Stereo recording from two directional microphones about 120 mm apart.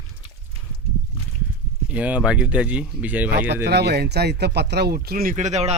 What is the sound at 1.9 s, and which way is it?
Speech, 10° right (ahead or behind).